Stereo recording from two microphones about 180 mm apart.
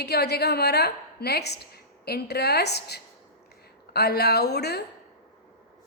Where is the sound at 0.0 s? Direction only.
65° left (ahead or behind).